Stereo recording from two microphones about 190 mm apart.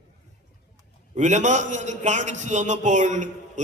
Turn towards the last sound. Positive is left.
turn(degrees=-40)  # may be behind; listen again after turning